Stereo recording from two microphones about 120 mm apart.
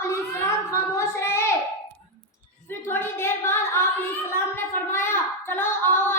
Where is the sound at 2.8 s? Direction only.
20° left (ahead or behind).